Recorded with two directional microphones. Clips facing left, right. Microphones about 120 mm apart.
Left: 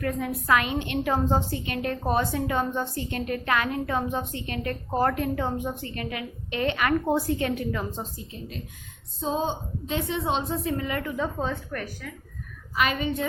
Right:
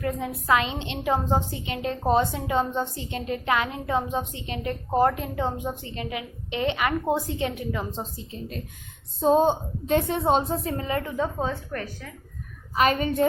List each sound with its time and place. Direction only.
0.0 s a woman's voice: 20° right (ahead or behind)
8.3 s a woman's voice: 45° right (ahead or behind)
11.2 s a woman's voice: 15° right (ahead or behind)
12.7 s a woman's voice: 40° right (ahead or behind)